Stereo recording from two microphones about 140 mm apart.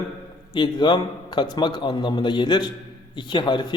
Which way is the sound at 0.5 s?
35° left (ahead or behind).